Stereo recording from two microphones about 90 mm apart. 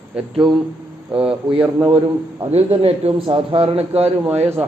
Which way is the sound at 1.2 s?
90° right.